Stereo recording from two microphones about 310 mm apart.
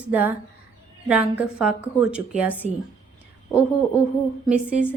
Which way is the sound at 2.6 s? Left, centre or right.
Right.